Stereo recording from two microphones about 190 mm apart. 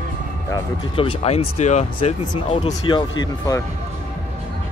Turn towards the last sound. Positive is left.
turn(degrees=20)  # may be behind; listen again after turning